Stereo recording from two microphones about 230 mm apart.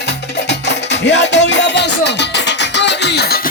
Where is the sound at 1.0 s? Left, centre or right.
Left.